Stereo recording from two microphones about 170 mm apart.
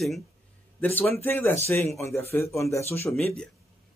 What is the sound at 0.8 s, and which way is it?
A man's voice, 10° left (ahead or behind).